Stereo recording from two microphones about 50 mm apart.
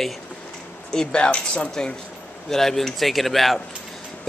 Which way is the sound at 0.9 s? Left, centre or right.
Centre.